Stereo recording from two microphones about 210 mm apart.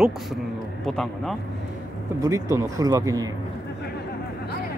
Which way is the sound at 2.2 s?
15° right (ahead or behind).